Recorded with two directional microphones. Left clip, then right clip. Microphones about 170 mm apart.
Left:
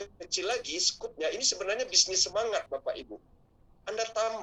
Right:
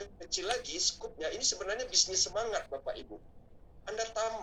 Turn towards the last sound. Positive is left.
turn(degrees=50)  # may be behind; listen again after turning